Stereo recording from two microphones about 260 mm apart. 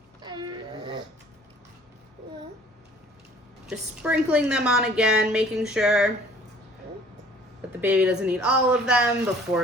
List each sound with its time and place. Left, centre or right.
0.2 s a sound: centre
3.7 s a woman's voice: centre
7.8 s a woman's voice: centre